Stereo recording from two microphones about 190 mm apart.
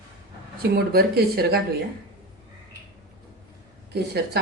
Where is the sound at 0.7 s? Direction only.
55° right (ahead or behind).